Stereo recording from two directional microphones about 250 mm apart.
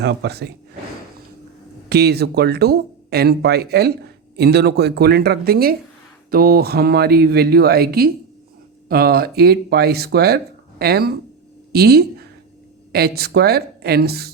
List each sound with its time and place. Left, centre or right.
0.0 s speech: right
1.9 s a woman's voice: right